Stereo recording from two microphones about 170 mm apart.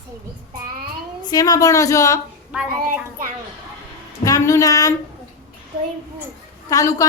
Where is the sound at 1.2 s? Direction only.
20° left (ahead or behind).